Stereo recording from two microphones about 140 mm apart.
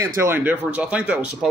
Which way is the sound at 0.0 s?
20° right (ahead or behind).